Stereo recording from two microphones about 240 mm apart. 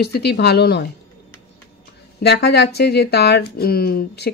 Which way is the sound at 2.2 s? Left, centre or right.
Left.